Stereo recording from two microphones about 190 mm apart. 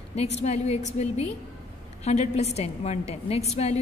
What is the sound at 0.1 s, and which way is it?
A woman's voice, 35° left (ahead or behind).